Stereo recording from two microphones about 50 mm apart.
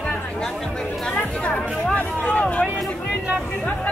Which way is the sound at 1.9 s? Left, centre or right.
Left.